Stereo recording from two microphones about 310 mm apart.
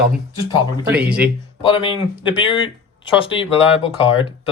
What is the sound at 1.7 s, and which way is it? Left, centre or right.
Speech, centre.